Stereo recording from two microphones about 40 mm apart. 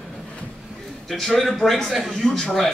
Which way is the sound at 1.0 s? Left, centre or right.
Centre.